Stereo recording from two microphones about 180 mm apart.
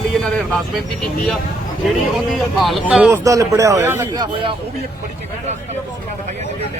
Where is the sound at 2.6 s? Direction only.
Centre (ahead or behind).